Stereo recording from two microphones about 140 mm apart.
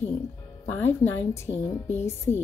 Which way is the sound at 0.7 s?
15° left (ahead or behind).